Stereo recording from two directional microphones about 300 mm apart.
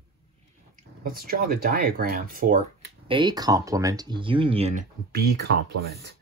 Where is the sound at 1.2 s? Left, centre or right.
Right.